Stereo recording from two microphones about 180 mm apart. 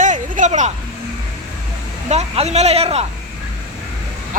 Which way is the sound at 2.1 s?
35° right (ahead or behind).